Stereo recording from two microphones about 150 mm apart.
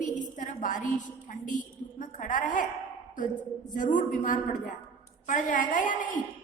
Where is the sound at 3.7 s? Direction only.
60° left (ahead or behind).